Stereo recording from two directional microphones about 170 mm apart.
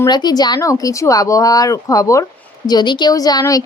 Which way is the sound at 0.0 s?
25° left (ahead or behind).